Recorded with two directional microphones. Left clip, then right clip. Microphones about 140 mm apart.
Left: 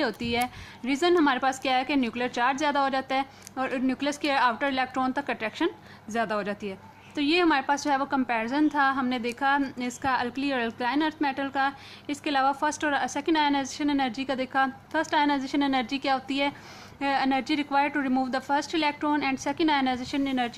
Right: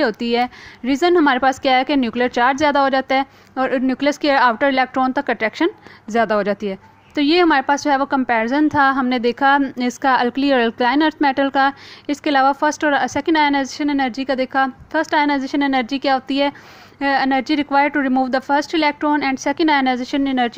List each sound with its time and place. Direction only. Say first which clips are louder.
0.0 s a woman's voice: right 9 dB; 40° right (ahead or behind)